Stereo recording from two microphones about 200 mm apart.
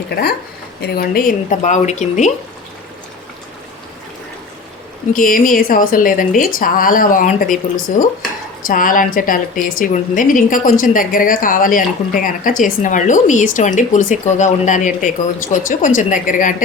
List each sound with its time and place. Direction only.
0.1 s a woman's voice: 50° left (ahead or behind); by 2.3 s 35° left (ahead or behind)
5.1 s a woman's voice: 45° left (ahead or behind)